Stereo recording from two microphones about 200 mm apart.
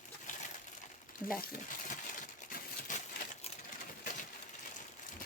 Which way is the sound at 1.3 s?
45° left (ahead or behind).